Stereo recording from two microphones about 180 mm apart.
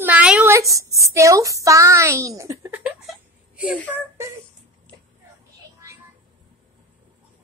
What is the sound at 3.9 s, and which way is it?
Speech, 15° right (ahead or behind).